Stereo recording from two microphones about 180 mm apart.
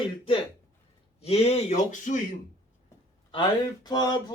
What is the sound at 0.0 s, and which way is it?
Speech, 30° left (ahead or behind).